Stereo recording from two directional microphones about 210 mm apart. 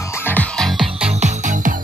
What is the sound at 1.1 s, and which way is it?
Music, 30° right (ahead or behind).